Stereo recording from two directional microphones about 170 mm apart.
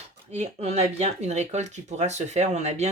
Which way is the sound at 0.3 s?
40° right (ahead or behind).